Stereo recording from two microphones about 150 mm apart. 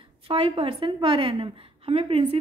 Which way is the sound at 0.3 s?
40° right (ahead or behind).